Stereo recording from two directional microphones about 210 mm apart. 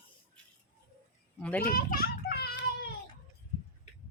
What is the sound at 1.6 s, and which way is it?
Children playing, 45° left (ahead or behind).